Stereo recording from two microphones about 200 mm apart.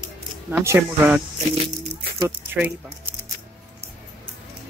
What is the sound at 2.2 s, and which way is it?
Speech, 10° right (ahead or behind).